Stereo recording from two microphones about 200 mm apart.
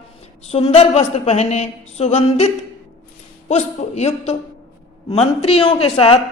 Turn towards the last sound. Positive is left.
turn(degrees=30)  # may be behind; listen again after turning